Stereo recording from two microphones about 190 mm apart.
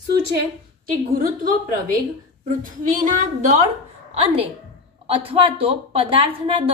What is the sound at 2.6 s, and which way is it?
Speech, 45° right (ahead or behind).